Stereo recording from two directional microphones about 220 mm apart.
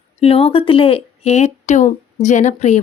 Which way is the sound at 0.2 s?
25° left (ahead or behind).